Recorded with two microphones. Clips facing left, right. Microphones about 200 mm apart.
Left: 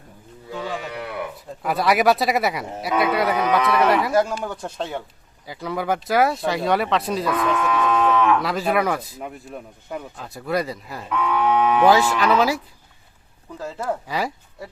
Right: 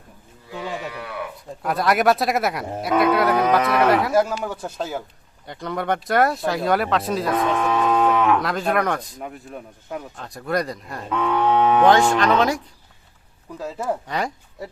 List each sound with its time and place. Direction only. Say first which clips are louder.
1.6 s speech: even; centre (ahead or behind)
7.3 s moo: right 2 dB; 35° right (ahead or behind)
8.4 s speech: even; 5° left (ahead or behind)
11.1 s speech: right 1 dB; 25° right (ahead or behind)
11.8 s speech: even; 5° left (ahead or behind)
13.6 s speech: right 1 dB; 5° right (ahead or behind)